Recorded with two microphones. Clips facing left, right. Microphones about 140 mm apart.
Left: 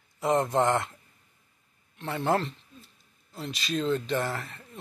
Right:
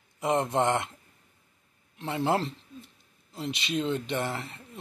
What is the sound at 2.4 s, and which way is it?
Speech, 30° right (ahead or behind).